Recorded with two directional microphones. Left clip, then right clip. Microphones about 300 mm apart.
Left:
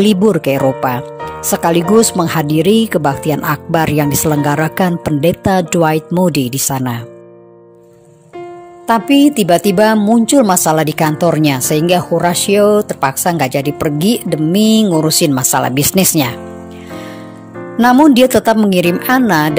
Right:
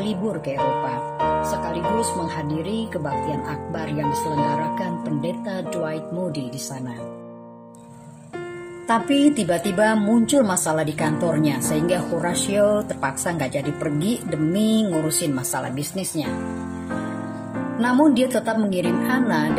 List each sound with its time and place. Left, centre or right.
0.0 s speech: left
2.2 s speech: left
8.8 s a woman's voice: left
17.7 s speech: left